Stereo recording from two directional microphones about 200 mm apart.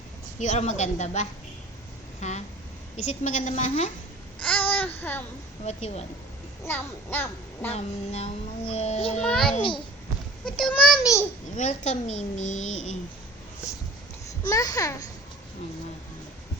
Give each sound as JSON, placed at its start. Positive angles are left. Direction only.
{"t": 0.3, "sound": "speech", "side_deg": 35}
{"t": 4.4, "sound": "babbling", "side_deg": 10}
{"t": 5.6, "sound": "speech", "side_deg": 35}
{"t": 6.7, "sound": "a child's voice", "side_deg": 10}
{"t": 7.7, "sound": "speech", "side_deg": 30}
{"t": 9.2, "sound": "a child's voice", "side_deg": 0}
{"t": 11.5, "sound": "speech", "side_deg": 35}
{"t": 14.5, "sound": "a child's voice", "side_deg": 15}